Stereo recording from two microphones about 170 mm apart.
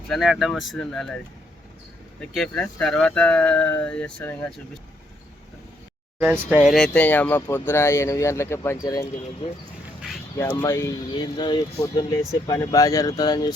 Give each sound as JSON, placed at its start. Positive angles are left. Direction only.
{"t": 0.1, "sound": "speech", "side_deg": 0}
{"t": 2.3, "sound": "speech", "side_deg": 5}
{"t": 6.5, "sound": "speech", "side_deg": -5}
{"t": 10.6, "sound": "speech", "side_deg": 15}